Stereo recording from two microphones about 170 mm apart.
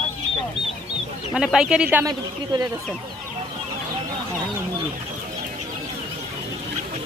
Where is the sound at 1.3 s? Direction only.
5° right (ahead or behind).